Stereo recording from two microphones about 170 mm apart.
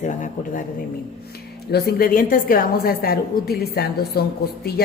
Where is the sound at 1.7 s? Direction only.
65° left (ahead or behind).